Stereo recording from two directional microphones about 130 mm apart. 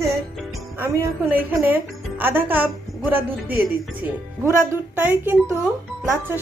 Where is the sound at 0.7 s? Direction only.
15° right (ahead or behind).